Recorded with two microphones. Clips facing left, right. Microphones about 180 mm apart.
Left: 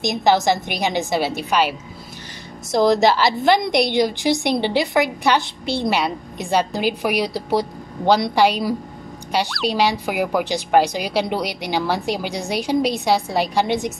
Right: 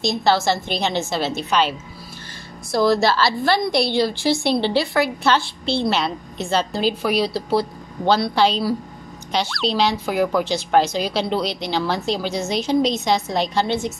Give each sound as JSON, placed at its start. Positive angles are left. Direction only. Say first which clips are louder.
{"t": 0.0, "sound": "a woman's voice", "louder": "left 1 dB", "side_deg": 15}